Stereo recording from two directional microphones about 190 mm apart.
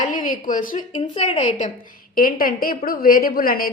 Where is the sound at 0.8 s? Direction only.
25° left (ahead or behind).